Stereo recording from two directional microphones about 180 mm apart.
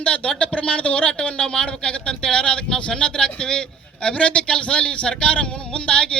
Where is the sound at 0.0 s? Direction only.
5° left (ahead or behind).